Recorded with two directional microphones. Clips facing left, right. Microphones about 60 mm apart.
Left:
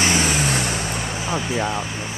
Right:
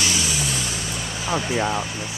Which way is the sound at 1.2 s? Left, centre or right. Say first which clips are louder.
Right 2 dB; centre.